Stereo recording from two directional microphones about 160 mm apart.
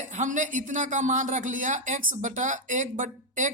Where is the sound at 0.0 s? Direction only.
50° right (ahead or behind).